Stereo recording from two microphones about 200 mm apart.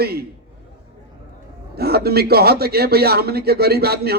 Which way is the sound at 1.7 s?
50° right (ahead or behind).